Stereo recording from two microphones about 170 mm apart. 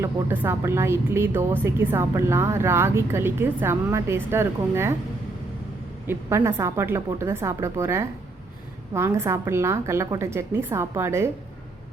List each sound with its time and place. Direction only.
0.0 s speech: 15° right (ahead or behind)
6.1 s speech: 15° right (ahead or behind)